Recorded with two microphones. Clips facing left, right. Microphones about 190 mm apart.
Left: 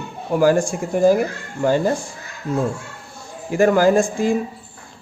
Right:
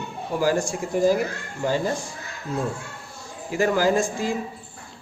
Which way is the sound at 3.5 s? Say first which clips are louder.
Left 6 dB; 50° left (ahead or behind).